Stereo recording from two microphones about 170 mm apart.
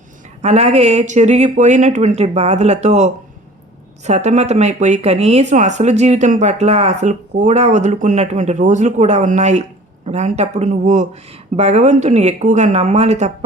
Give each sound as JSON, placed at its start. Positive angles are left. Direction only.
{"t": 0.4, "sound": "speech", "side_deg": -40}